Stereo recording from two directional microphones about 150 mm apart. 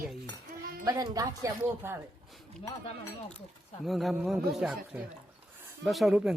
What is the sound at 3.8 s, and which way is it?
A man's voice, centre (ahead or behind).